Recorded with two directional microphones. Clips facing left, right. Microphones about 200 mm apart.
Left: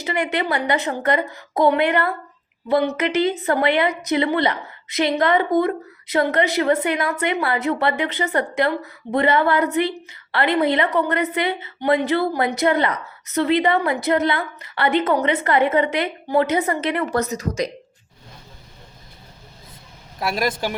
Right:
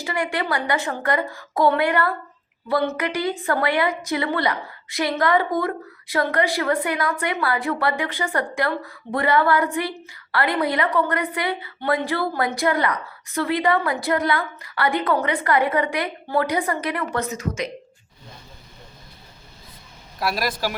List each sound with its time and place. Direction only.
0.0 s a woman's voice: 20° left (ahead or behind)
17.2 s speech: 35° left (ahead or behind)
20.1 s a woman's voice: 20° left (ahead or behind)